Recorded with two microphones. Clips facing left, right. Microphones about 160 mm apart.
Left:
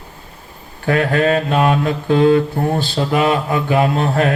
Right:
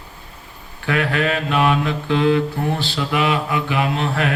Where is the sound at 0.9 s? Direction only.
40° left (ahead or behind).